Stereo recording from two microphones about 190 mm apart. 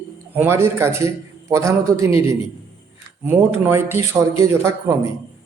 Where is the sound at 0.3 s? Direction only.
10° right (ahead or behind).